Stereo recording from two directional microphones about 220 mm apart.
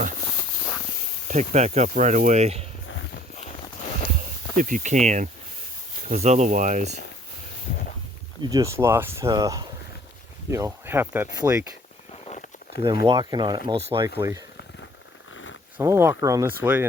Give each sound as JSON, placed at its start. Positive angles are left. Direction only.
{"t": 1.3, "sound": "speech", "side_deg": -35}
{"t": 4.5, "sound": "speech", "side_deg": -35}
{"t": 8.4, "sound": "speech", "side_deg": -15}
{"t": 12.3, "sound": "a sound", "side_deg": 35}
{"t": 12.8, "sound": "speech", "side_deg": -20}
{"t": 15.8, "sound": "speech", "side_deg": -10}